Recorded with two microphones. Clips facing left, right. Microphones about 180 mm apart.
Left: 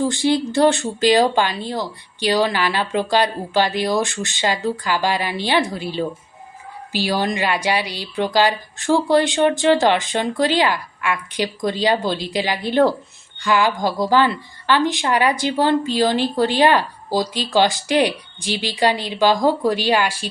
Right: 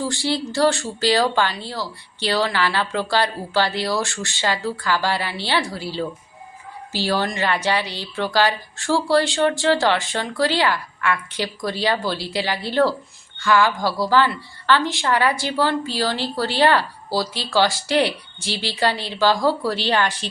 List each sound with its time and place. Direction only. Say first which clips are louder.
0.0 s speech: left 5 dB; 20° left (ahead or behind)